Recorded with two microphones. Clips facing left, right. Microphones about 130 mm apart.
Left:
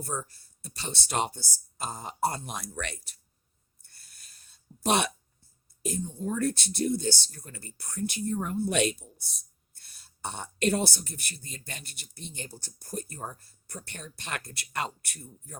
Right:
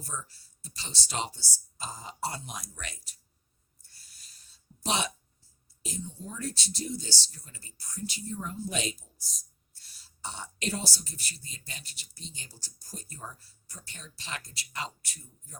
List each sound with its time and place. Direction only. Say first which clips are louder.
0.0 s speech: left 6 dB; 55° left (ahead or behind)
3.8 s throat clearing: left 2 dB; 55° left (ahead or behind)
5.8 s speech: left 8 dB; 50° left (ahead or behind)